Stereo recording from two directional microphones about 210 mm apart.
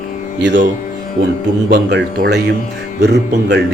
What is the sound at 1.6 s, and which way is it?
Speech, 55° right (ahead or behind).